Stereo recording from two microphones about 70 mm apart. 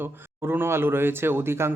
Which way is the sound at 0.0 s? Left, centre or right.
Right.